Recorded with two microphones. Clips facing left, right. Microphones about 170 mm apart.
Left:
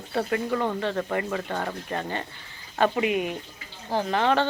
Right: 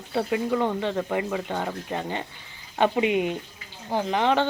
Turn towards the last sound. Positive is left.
turn(degrees=-15)  # may be behind; listen again after turning